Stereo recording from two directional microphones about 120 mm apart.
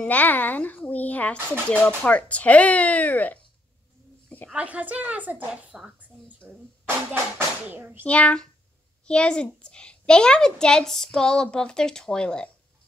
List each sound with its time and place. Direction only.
0.0 s a woman's voice: 10° left (ahead or behind)
4.5 s speech: 10° right (ahead or behind)
8.0 s a woman's voice: 10° left (ahead or behind)